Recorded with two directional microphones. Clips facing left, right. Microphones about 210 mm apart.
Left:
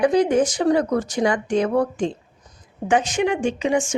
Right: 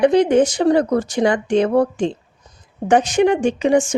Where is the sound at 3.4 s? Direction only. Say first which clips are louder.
Right 5 dB; 65° right (ahead or behind).